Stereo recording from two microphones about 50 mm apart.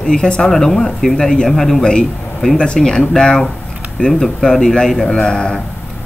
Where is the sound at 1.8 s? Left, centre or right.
Centre.